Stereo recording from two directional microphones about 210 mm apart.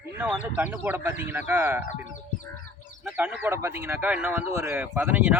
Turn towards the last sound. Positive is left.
turn(degrees=-5)  # may be behind; listen again after turning